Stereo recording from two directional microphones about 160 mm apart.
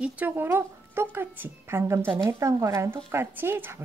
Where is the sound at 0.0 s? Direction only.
10° right (ahead or behind).